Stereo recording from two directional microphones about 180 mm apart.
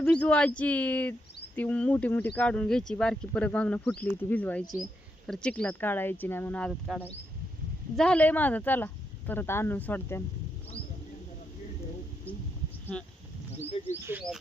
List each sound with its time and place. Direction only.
0.0 s speech: 5° left (ahead or behind)
12.9 s speech: 5° left (ahead or behind)
13.7 s speech: 35° left (ahead or behind)
14.0 s frog: 10° right (ahead or behind)